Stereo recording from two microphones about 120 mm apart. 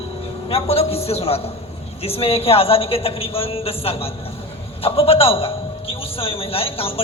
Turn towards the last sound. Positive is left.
turn(degrees=50)  # may be behind; listen again after turning